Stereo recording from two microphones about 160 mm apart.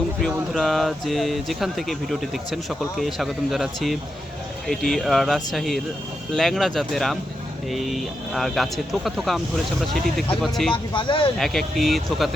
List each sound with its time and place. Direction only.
0.5 s speech: centre (ahead or behind)
10.4 s speech: centre (ahead or behind)
10.9 s speech: 30° left (ahead or behind)
11.3 s speech: centre (ahead or behind)